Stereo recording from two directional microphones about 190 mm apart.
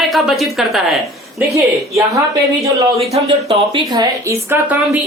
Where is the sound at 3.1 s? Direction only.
30° right (ahead or behind).